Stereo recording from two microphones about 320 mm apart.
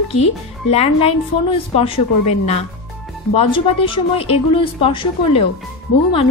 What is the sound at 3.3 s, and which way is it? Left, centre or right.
A woman's voice, centre.